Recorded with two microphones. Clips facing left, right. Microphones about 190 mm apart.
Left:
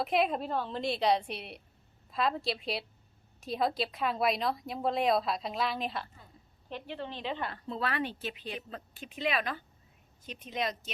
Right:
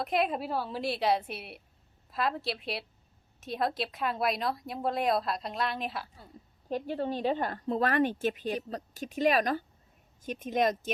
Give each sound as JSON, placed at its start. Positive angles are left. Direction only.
{"t": 0.0, "sound": "a woman's voice", "side_deg": 0}
{"t": 6.7, "sound": "a woman's voice", "side_deg": -40}